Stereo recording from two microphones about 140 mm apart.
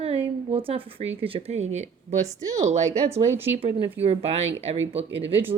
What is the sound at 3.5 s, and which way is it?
Speech, 45° right (ahead or behind).